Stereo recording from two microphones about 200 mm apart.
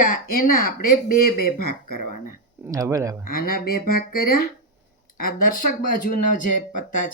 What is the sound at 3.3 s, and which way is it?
Speech, 50° left (ahead or behind).